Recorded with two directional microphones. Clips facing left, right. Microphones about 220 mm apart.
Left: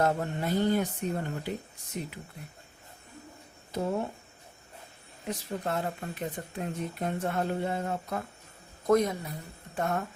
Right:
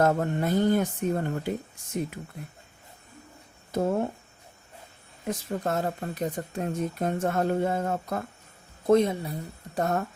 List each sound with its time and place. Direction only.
0.0 s speech: 50° right (ahead or behind)
3.7 s speech: 50° right (ahead or behind)
5.3 s speech: 45° right (ahead or behind)
8.9 s a woman's voice: 25° right (ahead or behind)